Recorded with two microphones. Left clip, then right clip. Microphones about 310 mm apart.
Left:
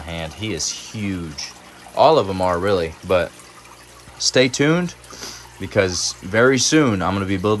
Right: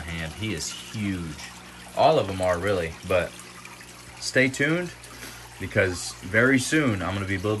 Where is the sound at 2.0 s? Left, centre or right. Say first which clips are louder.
Left 6 dB; centre.